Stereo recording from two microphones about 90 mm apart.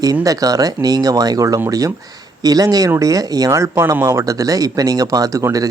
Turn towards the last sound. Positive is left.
turn(degrees=-40)  # may be behind; listen again after turning